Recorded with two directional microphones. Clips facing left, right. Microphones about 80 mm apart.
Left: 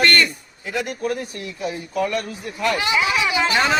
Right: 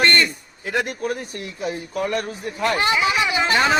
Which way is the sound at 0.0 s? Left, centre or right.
Right.